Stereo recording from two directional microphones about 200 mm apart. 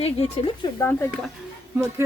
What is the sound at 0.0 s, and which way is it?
Speech, 30° left (ahead or behind).